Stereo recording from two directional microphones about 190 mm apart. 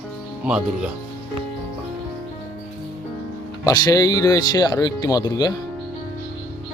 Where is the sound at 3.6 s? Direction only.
20° left (ahead or behind).